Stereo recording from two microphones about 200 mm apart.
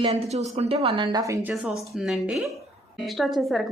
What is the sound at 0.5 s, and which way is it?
A woman's voice, 30° right (ahead or behind).